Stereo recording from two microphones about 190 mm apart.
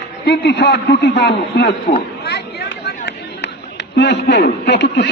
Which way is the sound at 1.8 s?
50° left (ahead or behind).